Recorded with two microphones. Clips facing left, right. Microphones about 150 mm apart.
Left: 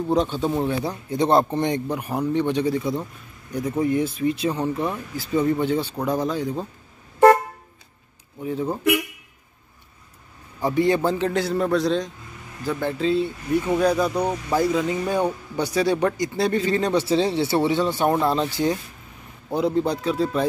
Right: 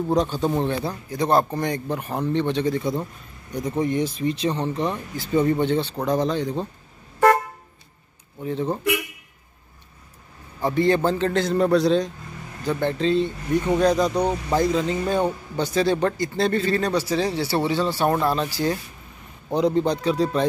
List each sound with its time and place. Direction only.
0.1 s speech: centre (ahead or behind)
1.0 s speech: 25° left (ahead or behind)
2.0 s a man's voice: 10° left (ahead or behind)
8.4 s a man's voice: 5° left (ahead or behind)
10.6 s a man's voice: 10° left (ahead or behind)
19.5 s speech: 5° left (ahead or behind)